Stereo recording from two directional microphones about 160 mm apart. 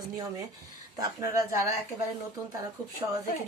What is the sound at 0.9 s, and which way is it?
Speech, 20° right (ahead or behind).